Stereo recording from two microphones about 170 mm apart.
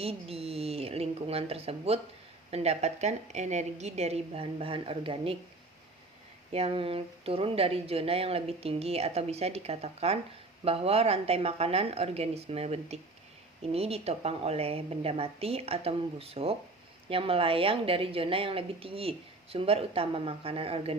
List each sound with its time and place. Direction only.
0.0 s a woman's voice: 35° right (ahead or behind)
6.5 s a woman's voice: 35° right (ahead or behind)